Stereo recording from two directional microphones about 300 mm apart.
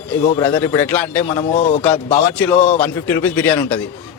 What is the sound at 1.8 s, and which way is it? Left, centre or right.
Speech, centre.